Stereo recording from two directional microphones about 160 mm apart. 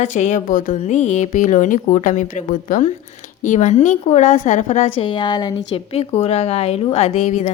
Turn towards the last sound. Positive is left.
turn(degrees=50)  # may be behind; listen again after turning